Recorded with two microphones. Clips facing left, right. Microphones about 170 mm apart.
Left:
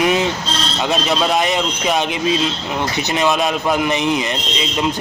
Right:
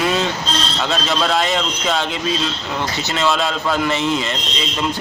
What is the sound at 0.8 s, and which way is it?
Speech, 15° left (ahead or behind).